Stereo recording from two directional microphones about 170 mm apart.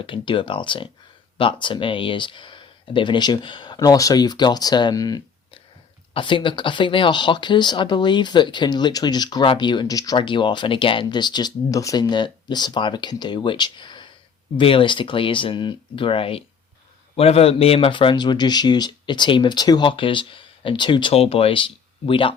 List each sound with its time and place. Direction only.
0.0 s speech: 30° left (ahead or behind)